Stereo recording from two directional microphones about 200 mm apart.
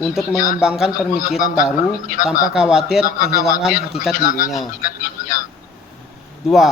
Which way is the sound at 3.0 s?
45° left (ahead or behind).